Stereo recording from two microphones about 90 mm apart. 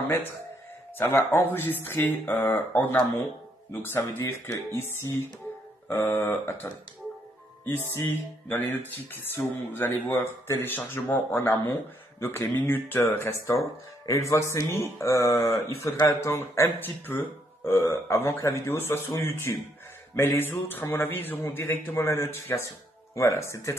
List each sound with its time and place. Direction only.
0.9 s speech: 25° left (ahead or behind)
6.1 s speech: 35° left (ahead or behind)
7.6 s speech: 25° left (ahead or behind)